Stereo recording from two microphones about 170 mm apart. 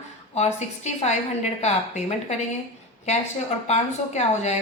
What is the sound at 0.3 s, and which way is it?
A woman's voice, 40° left (ahead or behind).